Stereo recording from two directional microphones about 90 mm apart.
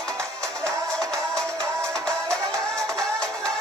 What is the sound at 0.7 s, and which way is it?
Music, 10° left (ahead or behind).